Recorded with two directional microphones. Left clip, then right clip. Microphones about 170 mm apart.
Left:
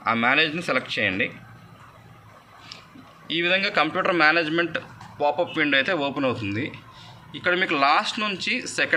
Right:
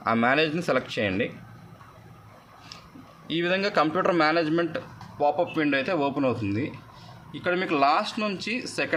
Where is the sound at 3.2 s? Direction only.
40° right (ahead or behind).